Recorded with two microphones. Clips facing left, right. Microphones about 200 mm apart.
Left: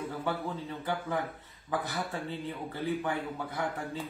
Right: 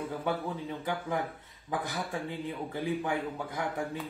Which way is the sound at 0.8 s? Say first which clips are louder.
Even; 15° right (ahead or behind).